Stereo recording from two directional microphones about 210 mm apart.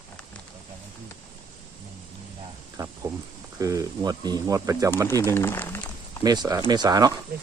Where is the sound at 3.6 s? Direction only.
15° right (ahead or behind).